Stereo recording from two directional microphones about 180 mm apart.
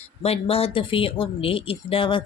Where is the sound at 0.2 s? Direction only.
35° left (ahead or behind).